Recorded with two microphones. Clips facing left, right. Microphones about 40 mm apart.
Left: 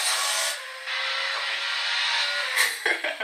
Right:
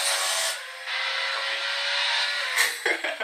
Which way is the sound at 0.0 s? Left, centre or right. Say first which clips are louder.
Even; centre.